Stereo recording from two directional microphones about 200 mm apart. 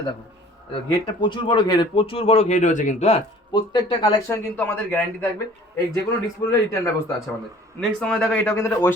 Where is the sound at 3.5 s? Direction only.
20° left (ahead or behind).